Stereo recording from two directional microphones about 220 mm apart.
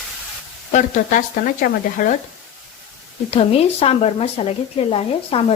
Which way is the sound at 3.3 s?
25° left (ahead or behind).